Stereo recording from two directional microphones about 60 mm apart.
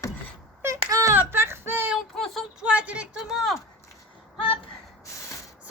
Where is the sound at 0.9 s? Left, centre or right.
Right.